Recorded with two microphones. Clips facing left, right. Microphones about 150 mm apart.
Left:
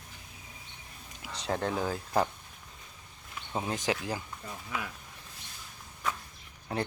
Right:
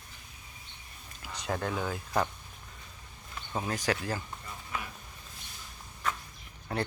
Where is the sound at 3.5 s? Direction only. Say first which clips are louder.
Even; 20° left (ahead or behind).